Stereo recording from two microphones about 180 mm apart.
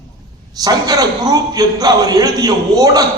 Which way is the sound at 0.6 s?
20° right (ahead or behind).